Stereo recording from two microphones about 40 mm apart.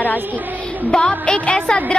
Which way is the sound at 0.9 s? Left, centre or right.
Left.